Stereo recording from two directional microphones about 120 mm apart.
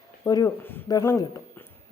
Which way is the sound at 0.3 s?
30° left (ahead or behind).